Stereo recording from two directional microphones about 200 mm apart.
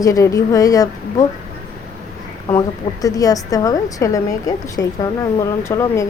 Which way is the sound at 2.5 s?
15° left (ahead or behind).